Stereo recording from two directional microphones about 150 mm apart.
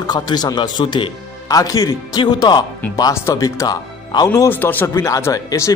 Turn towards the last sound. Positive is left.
turn(degrees=20)  # may be behind; listen again after turning